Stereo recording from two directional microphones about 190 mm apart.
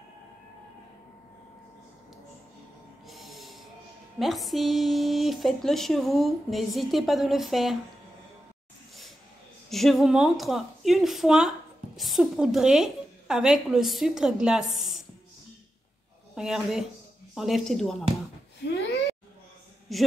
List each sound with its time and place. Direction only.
3.1 s a sound: centre (ahead or behind)
4.2 s speech: centre (ahead or behind)
9.7 s speech: centre (ahead or behind)
16.3 s speech: centre (ahead or behind)
18.6 s a sound: 60° left (ahead or behind)
19.9 s speech: centre (ahead or behind)